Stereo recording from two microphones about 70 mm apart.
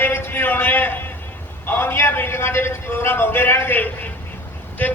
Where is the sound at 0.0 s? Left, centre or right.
Left.